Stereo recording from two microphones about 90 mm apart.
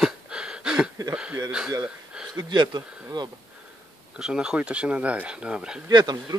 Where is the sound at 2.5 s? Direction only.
55° right (ahead or behind).